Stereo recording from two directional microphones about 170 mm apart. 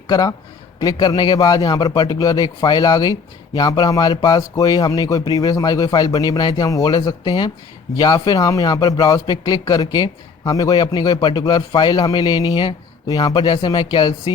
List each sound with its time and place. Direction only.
0.1 s a man's voice: 25° left (ahead or behind)